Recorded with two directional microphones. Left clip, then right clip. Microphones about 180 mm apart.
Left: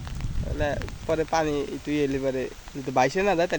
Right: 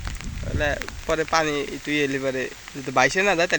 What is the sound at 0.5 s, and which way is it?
Speech, 15° left (ahead or behind).